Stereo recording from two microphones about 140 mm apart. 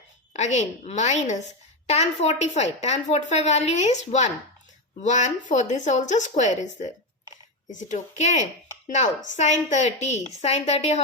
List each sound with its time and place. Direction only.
0.3 s a woman's voice: 55° left (ahead or behind)